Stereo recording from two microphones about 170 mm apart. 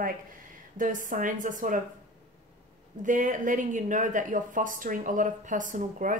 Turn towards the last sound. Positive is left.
turn(degrees=-50)  # may be behind; listen again after turning